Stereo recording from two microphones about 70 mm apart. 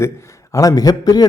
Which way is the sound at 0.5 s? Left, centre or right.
Left.